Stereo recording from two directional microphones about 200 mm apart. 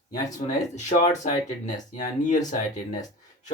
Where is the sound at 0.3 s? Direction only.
40° left (ahead or behind).